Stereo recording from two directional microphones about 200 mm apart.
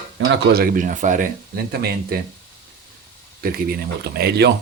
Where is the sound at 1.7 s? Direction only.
50° right (ahead or behind).